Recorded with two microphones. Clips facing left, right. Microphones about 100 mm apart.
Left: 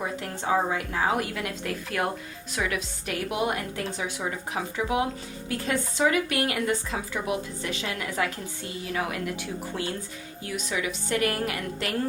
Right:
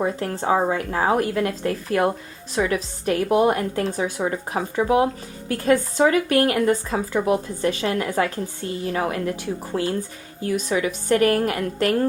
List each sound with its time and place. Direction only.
0.0 s a woman's voice: 40° right (ahead or behind)